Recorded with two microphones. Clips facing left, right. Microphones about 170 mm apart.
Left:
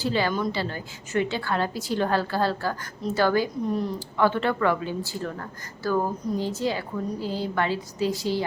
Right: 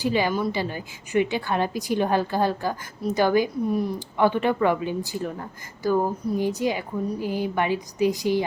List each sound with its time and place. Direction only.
0.0 s a woman's voice: 15° right (ahead or behind)